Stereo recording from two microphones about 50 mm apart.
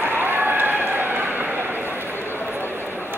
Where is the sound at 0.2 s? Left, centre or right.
Right.